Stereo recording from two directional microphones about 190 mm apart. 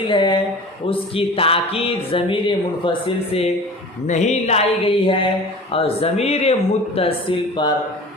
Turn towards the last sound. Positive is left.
turn(degrees=25)  # may be behind; listen again after turning